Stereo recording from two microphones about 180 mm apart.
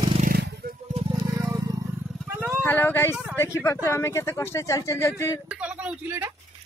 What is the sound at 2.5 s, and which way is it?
Vehicle, 10° left (ahead or behind).